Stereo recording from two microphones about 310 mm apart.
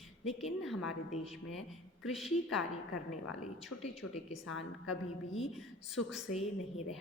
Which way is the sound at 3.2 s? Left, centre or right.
Left.